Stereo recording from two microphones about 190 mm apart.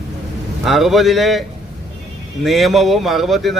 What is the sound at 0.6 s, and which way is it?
Speech, centre (ahead or behind).